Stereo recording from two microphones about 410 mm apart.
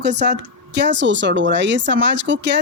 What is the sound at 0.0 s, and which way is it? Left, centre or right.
Speech, right.